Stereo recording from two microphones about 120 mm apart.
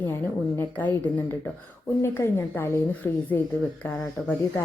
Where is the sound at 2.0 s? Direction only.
20° left (ahead or behind).